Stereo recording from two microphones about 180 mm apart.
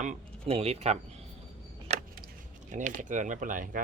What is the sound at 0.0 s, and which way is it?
Speech, 40° right (ahead or behind).